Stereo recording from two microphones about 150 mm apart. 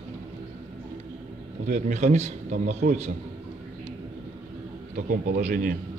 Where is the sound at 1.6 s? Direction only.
55° right (ahead or behind).